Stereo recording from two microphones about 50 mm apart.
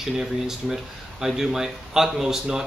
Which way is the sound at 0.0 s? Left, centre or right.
Centre.